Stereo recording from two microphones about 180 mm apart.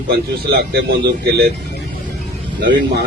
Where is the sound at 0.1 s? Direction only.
65° right (ahead or behind).